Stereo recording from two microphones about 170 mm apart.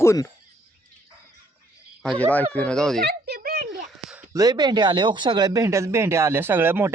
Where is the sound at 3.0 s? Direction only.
65° right (ahead or behind).